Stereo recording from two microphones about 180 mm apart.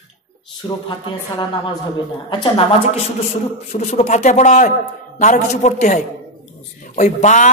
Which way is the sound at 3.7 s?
40° left (ahead or behind).